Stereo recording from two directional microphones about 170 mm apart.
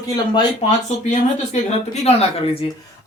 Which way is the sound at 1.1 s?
40° left (ahead or behind).